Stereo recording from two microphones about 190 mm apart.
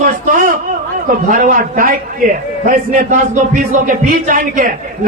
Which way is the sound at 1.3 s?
45° right (ahead or behind).